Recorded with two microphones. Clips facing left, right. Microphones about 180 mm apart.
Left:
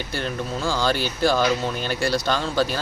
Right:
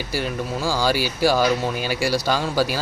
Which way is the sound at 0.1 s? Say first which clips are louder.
Right 3 dB; 5° right (ahead or behind).